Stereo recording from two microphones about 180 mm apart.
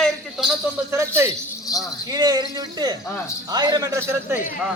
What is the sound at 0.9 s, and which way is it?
A man's voice, 15° right (ahead or behind).